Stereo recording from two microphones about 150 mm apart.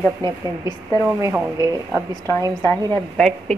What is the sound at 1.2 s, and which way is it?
Speech, 20° right (ahead or behind).